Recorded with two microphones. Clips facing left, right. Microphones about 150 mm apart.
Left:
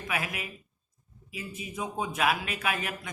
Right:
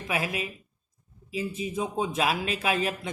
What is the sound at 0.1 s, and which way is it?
A man's voice, 25° right (ahead or behind).